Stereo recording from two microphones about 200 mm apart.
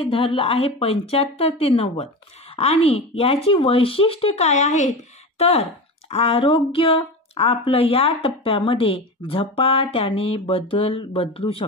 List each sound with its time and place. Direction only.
0.0 s speech: 25° left (ahead or behind)